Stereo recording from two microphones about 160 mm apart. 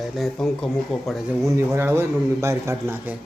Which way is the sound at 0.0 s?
Centre (ahead or behind).